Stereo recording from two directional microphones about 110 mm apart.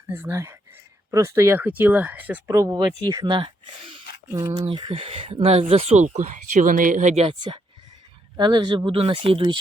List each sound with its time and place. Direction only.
0.1 s speech: 25° right (ahead or behind)
2.5 s speech: 30° right (ahead or behind)
3.2 s speech: 45° right (ahead or behind)
4.3 s speech: 35° right (ahead or behind)
4.6 s speech: 50° right (ahead or behind); by 7.3 s 90° right
7.3 s speech: 50° right (ahead or behind)